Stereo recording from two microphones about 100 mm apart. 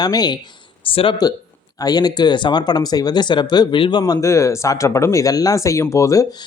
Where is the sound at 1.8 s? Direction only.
40° left (ahead or behind).